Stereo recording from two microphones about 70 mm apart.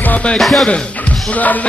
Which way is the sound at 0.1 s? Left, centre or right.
Centre.